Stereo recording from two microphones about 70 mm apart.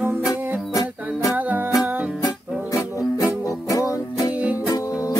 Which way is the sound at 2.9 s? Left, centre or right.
Left.